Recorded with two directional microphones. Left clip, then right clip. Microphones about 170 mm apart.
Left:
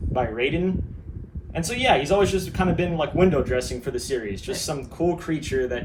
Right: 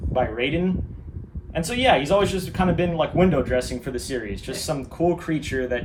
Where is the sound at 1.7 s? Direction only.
60° right (ahead or behind).